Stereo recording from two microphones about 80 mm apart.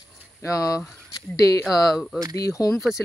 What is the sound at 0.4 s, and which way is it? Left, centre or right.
Speech, left.